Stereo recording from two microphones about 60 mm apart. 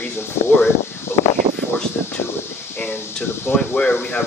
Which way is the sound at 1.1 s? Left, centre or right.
Left.